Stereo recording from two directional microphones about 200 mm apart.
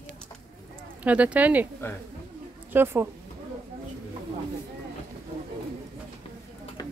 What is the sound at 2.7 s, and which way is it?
Speech, 10° right (ahead or behind).